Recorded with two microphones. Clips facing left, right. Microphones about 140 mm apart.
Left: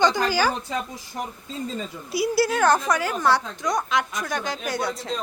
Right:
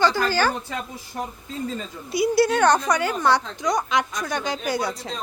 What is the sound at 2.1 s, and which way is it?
A woman's voice, centre (ahead or behind).